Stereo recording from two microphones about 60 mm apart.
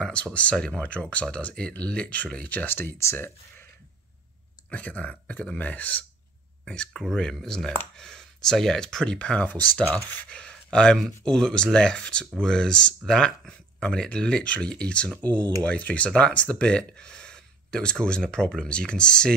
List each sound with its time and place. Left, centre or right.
0.0 s speech: centre
2.5 s speech: left
3.0 s speech: left
4.6 s speech: left
6.6 s speech: centre
10.3 s speech: centre